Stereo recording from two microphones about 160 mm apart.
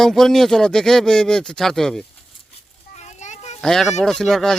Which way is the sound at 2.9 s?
45° left (ahead or behind).